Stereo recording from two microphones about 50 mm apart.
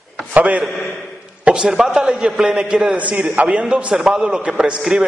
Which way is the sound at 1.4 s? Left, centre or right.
Centre.